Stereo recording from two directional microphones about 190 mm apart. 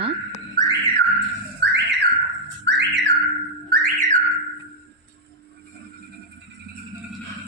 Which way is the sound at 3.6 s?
50° right (ahead or behind).